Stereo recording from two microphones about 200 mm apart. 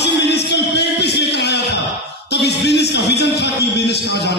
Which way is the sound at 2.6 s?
55° left (ahead or behind).